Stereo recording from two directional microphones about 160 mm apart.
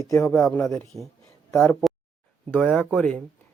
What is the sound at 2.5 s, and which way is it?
Speech, 10° left (ahead or behind).